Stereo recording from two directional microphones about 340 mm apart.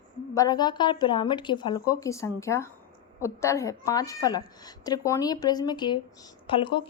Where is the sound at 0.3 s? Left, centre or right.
Centre.